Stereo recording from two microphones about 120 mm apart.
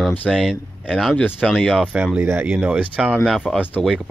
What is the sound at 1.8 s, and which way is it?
Speech, 10° right (ahead or behind).